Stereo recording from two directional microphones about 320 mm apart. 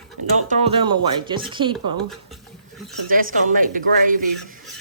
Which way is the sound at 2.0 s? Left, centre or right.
Centre.